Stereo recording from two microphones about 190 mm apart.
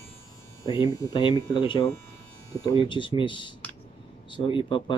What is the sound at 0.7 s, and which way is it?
Speech, 20° left (ahead or behind).